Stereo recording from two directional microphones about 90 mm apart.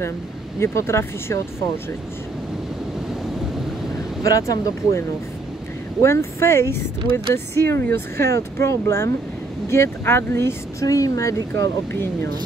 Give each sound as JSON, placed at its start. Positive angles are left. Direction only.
{"t": 0.6, "sound": "speech", "side_deg": 30}
{"t": 4.2, "sound": "speech", "side_deg": 40}
{"t": 6.0, "sound": "speech", "side_deg": 30}